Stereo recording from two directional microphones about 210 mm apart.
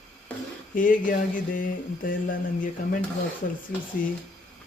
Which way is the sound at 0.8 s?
40° left (ahead or behind).